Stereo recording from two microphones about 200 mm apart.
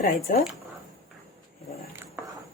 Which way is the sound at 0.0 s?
40° left (ahead or behind).